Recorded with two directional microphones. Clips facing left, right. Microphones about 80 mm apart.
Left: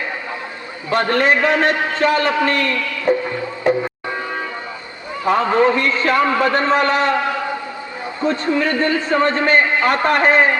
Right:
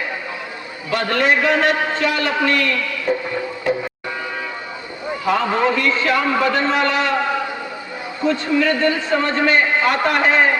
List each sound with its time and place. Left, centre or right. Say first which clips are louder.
0.9 s a man's voice: left 2 dB; left
5.2 s a man's voice: left 3 dB; left
8.3 s a man's voice: right 1 dB; left